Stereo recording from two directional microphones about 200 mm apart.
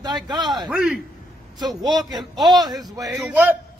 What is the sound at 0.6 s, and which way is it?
Speech, 5° right (ahead or behind).